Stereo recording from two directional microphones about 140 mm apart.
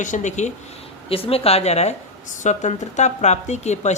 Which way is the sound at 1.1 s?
45° left (ahead or behind).